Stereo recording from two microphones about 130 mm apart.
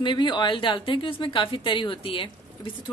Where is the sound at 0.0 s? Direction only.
35° left (ahead or behind).